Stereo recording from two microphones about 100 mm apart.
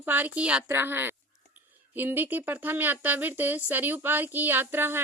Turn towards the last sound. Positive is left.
turn(degrees=-20)  # may be behind; listen again after turning